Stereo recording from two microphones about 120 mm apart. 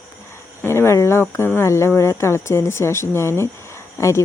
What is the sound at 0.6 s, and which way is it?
A woman's voice, 20° left (ahead or behind).